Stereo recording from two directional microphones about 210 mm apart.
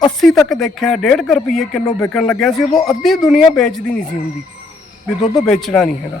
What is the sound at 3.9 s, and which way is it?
Speech, 35° left (ahead or behind).